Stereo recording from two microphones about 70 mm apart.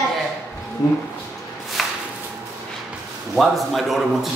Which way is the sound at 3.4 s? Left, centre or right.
Centre.